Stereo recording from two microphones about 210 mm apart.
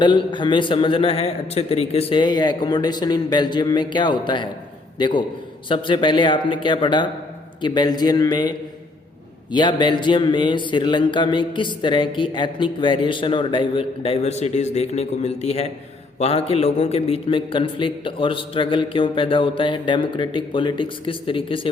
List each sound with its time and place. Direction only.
0.0 s a man's voice: 20° left (ahead or behind)